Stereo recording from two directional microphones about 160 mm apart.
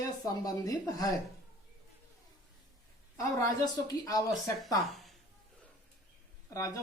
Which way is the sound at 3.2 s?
20° left (ahead or behind).